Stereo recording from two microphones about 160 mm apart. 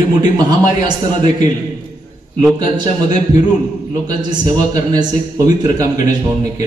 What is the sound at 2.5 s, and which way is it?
Speech, 25° right (ahead or behind).